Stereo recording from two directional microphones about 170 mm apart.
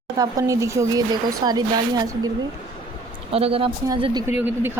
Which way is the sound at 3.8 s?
20° right (ahead or behind).